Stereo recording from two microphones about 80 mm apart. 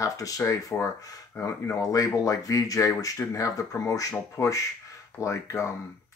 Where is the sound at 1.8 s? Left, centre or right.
Left.